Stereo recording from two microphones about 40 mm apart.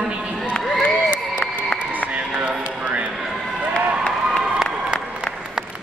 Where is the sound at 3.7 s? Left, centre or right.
Left.